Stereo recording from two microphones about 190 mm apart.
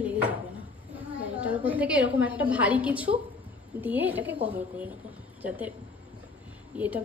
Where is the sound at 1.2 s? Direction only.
5° right (ahead or behind).